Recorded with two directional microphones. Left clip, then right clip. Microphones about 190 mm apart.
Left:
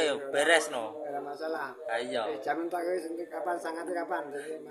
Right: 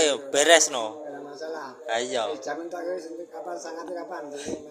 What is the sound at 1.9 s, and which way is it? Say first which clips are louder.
Speech: right 6 dB; 20° right (ahead or behind).